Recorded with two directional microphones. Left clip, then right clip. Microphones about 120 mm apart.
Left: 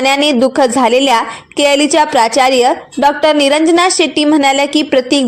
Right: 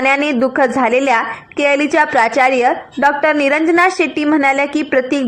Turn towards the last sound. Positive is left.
turn(degrees=25)  # may be behind; listen again after turning